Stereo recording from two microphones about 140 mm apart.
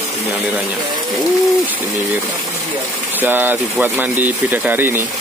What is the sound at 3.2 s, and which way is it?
Speech, 15° right (ahead or behind).